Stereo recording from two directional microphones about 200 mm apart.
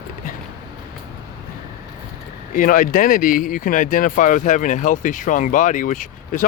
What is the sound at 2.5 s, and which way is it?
Speech, 45° left (ahead or behind).